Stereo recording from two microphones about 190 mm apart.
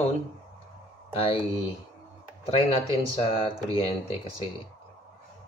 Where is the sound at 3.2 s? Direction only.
30° left (ahead or behind).